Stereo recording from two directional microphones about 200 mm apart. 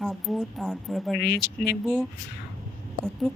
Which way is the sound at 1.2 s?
55° left (ahead or behind).